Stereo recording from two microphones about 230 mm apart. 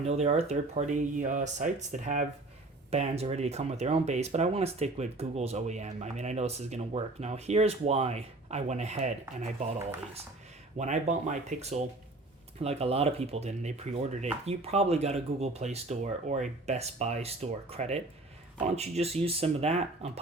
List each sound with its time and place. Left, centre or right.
0.0 s speech: right
10.8 s speech: right